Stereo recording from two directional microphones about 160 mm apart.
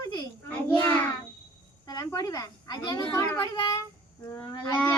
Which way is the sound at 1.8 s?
25° left (ahead or behind).